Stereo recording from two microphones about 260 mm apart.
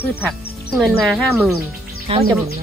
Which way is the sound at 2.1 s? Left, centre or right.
Right.